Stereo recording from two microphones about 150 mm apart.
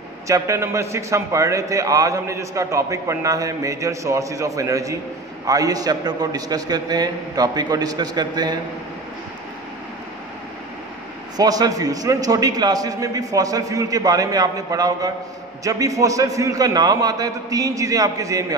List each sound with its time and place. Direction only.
0.3 s a man's voice: 20° right (ahead or behind)
11.3 s a man's voice: 25° right (ahead or behind)